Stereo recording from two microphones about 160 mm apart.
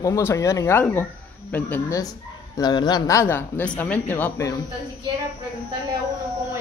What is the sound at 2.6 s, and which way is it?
Speech, 25° left (ahead or behind).